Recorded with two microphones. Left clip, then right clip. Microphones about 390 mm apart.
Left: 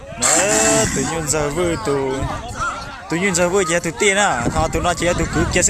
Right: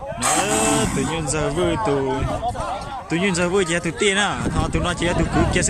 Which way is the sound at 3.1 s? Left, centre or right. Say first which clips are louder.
Left 3 dB; centre.